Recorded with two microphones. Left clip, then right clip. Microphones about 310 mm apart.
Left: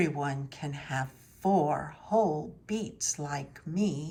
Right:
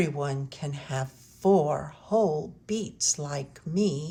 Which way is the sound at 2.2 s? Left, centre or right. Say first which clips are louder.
Right 2 dB; right.